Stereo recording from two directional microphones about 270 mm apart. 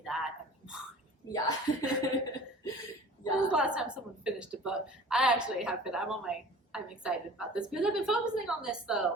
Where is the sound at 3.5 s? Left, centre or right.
Centre.